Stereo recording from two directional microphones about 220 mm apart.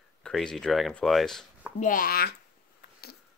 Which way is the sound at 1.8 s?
40° left (ahead or behind).